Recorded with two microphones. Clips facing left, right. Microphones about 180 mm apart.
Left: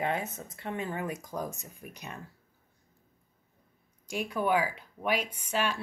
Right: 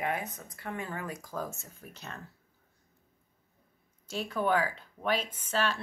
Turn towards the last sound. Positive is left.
turn(degrees=10)  # may be behind; listen again after turning